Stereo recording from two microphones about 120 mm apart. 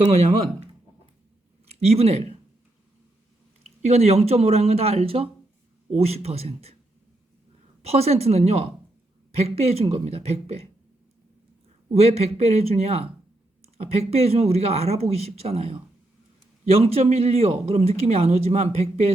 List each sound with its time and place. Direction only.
0.1 s speech: 65° right (ahead or behind)
3.8 s speech: 60° right (ahead or behind)
7.8 s speech: 60° right (ahead or behind)
11.9 s speech: 60° right (ahead or behind)